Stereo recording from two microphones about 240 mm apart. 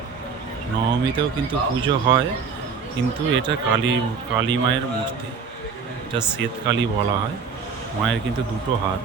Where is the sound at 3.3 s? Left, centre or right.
Right.